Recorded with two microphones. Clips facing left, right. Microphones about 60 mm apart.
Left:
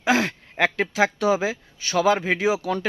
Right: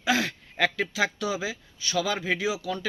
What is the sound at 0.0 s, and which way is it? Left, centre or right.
Speech, left.